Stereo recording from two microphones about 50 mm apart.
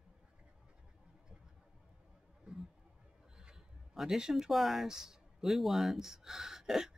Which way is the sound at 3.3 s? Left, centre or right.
Centre.